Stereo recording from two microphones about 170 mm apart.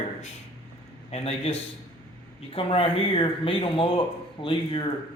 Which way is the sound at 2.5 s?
30° left (ahead or behind).